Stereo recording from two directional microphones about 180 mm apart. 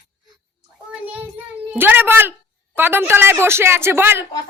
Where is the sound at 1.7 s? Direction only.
10° right (ahead or behind).